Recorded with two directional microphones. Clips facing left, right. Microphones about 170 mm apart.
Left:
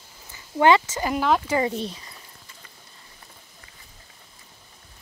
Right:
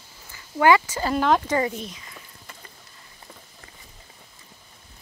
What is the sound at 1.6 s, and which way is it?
Speech, 30° left (ahead or behind).